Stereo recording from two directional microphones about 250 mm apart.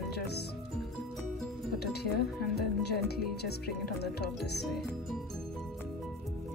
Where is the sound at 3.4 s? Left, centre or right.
Left.